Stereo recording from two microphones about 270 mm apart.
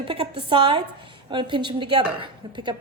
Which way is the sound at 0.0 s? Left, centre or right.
Centre.